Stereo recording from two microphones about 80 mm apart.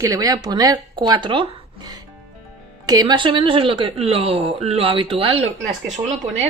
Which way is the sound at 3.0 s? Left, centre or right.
Right.